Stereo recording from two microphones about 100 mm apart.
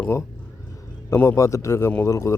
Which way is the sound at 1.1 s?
25° left (ahead or behind).